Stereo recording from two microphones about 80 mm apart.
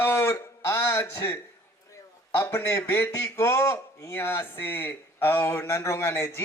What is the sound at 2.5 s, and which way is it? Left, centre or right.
A man's voice, left.